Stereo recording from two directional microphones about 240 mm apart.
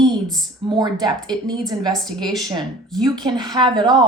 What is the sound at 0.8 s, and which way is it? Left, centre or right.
Speech, centre.